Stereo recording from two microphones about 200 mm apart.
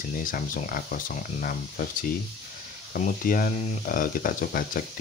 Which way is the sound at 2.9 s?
45° left (ahead or behind).